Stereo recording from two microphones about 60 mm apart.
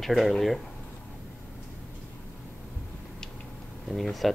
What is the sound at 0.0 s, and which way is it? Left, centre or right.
Speech, centre.